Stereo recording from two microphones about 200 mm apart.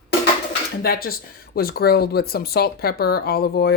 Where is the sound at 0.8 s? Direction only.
50° left (ahead or behind).